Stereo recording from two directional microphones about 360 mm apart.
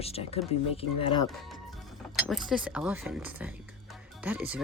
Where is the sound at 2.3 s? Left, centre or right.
Centre.